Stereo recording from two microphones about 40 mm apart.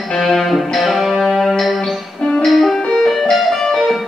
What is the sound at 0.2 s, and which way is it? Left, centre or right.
Music, centre.